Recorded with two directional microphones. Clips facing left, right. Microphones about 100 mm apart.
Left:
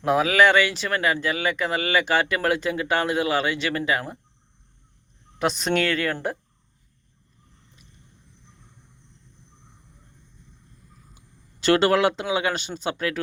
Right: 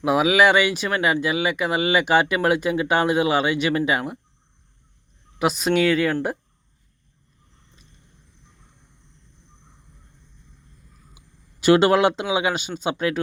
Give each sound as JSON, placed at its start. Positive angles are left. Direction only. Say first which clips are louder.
{"t": 0.0, "sound": "speech", "louder": "right 1 dB", "side_deg": -10}
{"t": 5.4, "sound": "speech", "louder": "right 3 dB", "side_deg": -5}
{"t": 11.6, "sound": "speech", "louder": "right 3 dB", "side_deg": -15}